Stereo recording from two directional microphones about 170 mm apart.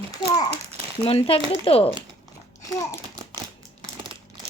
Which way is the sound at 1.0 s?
35° left (ahead or behind).